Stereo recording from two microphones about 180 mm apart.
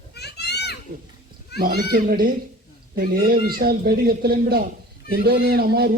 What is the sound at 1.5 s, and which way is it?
A man's voice, 55° right (ahead or behind).